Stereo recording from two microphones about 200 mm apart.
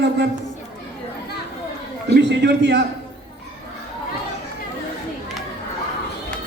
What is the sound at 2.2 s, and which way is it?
Speech, 60° right (ahead or behind).